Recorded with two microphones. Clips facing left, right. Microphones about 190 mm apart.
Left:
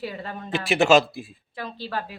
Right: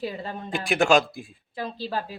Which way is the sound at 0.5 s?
5° left (ahead or behind).